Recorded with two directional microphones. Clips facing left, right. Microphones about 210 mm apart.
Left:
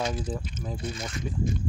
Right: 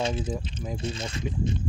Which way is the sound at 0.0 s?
25° right (ahead or behind).